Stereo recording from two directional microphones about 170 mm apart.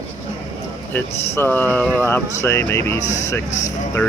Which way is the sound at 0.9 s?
10° left (ahead or behind).